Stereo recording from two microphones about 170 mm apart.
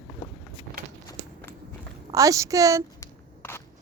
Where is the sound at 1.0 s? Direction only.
15° left (ahead or behind).